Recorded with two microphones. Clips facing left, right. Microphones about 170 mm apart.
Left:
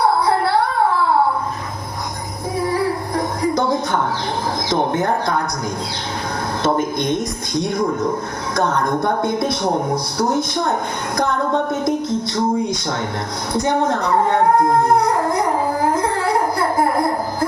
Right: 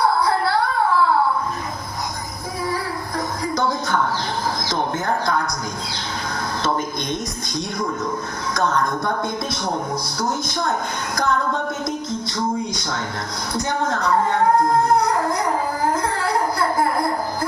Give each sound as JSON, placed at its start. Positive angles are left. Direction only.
{"t": 0.4, "sound": "music", "side_deg": 25}
{"t": 3.2, "sound": "music", "side_deg": 55}
{"t": 5.0, "sound": "speech", "side_deg": 25}
{"t": 6.7, "sound": "music", "side_deg": 55}
{"t": 13.8, "sound": "music", "side_deg": 60}
{"t": 16.0, "sound": "a sound", "side_deg": 55}
{"t": 16.7, "sound": "music", "side_deg": 20}